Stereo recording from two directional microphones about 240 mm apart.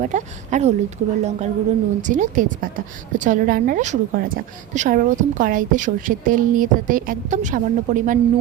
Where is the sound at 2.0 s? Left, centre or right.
Right.